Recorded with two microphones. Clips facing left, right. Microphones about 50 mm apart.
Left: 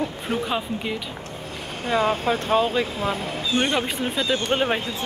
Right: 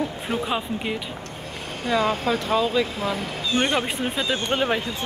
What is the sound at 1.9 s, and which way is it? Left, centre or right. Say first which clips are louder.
Speech: left 1 dB; left.